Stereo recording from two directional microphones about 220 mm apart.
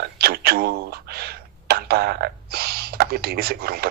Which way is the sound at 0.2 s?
45° right (ahead or behind).